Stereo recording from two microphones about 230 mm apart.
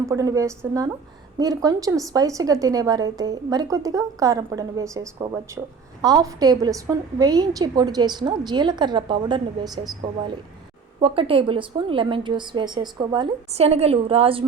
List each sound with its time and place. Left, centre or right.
0.0 s a woman's voice: centre